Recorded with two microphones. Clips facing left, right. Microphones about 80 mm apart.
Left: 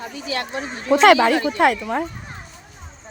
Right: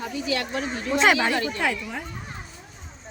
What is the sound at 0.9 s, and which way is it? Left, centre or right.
Speech, left.